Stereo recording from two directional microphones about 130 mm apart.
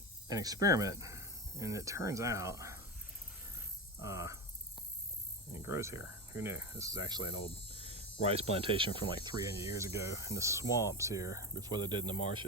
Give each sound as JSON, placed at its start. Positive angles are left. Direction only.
{"t": 0.3, "sound": "speech", "side_deg": -30}
{"t": 4.0, "sound": "cricket", "side_deg": -25}
{"t": 5.5, "sound": "cricket", "side_deg": -20}
{"t": 7.8, "sound": "speech", "side_deg": -50}
{"t": 9.4, "sound": "cricket", "side_deg": -25}